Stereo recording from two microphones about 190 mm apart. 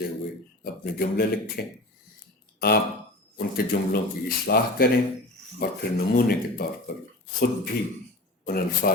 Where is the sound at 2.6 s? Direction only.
55° left (ahead or behind).